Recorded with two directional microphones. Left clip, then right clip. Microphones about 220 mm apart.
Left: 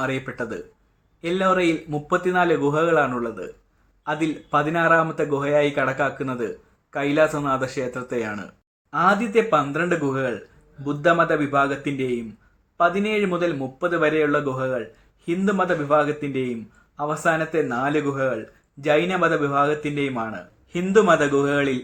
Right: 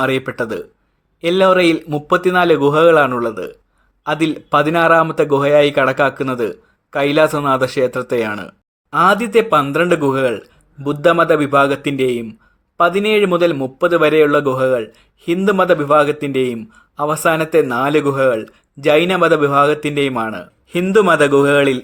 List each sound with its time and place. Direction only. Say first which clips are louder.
0.0 s speech: right 9 dB; 50° right (ahead or behind)